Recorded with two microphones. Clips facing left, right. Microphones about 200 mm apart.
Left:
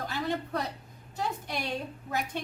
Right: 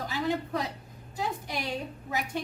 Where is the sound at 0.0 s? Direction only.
Centre (ahead or behind).